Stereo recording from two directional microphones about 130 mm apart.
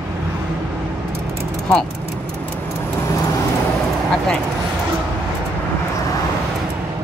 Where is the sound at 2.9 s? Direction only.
25° left (ahead or behind).